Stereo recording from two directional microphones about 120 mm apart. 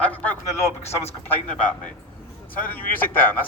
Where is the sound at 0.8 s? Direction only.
60° left (ahead or behind).